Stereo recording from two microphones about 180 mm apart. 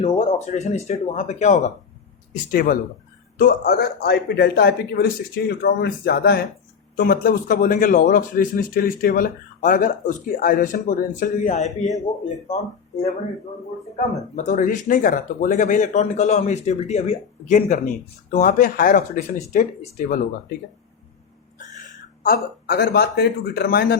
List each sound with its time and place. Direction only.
0.0 s speech: 30° left (ahead or behind)
2.5 s a man's voice: 55° left (ahead or behind)
14.3 s speech: 45° left (ahead or behind)
22.2 s a man's voice: 55° left (ahead or behind)